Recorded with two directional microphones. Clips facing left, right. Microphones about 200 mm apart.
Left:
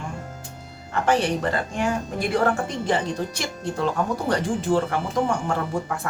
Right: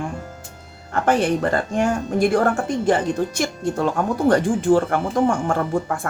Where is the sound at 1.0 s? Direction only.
50° right (ahead or behind).